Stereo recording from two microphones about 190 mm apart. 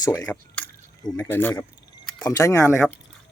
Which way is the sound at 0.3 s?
5° left (ahead or behind).